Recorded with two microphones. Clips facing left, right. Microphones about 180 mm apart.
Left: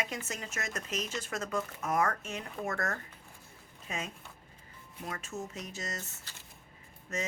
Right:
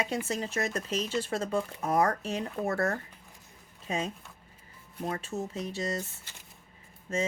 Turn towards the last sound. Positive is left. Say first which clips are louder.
# right 6 dB
turn(degrees=-30)  # may be behind; listen again after turning